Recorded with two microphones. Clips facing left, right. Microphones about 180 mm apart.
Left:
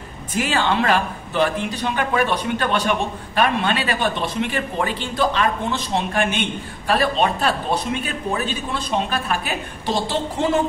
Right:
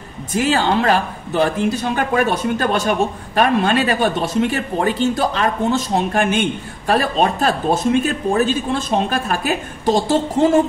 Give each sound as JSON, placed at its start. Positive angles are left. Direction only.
{"t": 0.3, "sound": "speech", "side_deg": -40}